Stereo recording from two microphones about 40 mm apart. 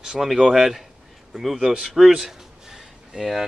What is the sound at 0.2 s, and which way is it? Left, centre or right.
Speech, centre.